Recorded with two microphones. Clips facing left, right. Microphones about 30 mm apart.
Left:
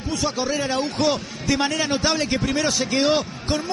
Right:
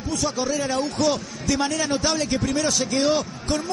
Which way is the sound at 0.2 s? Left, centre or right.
Left.